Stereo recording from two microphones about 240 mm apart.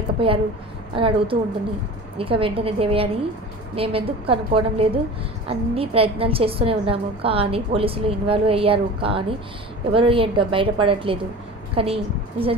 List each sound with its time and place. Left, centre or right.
0.2 s a woman's voice: right